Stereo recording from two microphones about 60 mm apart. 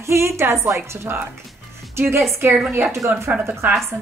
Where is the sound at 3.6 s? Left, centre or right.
Right.